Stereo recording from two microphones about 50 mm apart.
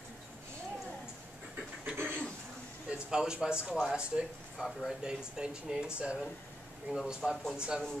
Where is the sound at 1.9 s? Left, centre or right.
Right.